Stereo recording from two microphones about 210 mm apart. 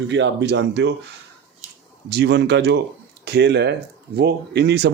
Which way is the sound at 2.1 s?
55° right (ahead or behind).